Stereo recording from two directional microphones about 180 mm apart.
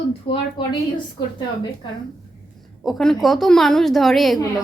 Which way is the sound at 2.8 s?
Centre (ahead or behind).